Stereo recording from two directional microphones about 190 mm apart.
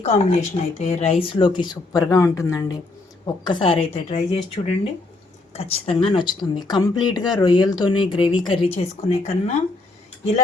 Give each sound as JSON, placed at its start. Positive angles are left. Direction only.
{"t": 0.0, "sound": "speech", "side_deg": 35}